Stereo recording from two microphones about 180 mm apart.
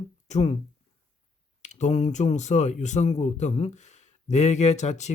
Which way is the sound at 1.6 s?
40° left (ahead or behind).